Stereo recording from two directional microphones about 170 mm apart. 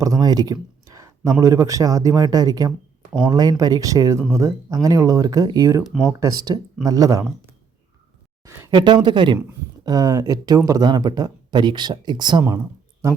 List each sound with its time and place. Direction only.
0.0 s speech: 20° right (ahead or behind)
5.8 s speech: centre (ahead or behind)
6.1 s speech: 20° right (ahead or behind)
8.4 s speech: 20° right (ahead or behind)